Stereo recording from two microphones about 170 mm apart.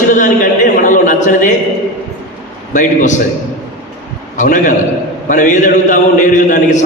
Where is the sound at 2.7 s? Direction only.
45° left (ahead or behind).